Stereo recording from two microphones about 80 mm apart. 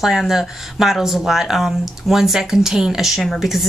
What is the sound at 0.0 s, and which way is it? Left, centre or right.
Speech, centre.